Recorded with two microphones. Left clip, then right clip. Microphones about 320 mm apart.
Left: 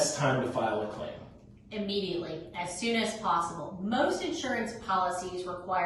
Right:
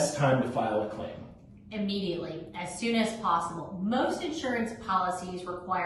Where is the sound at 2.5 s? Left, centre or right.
Centre.